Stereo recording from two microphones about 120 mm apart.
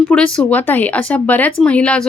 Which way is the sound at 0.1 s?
10° left (ahead or behind).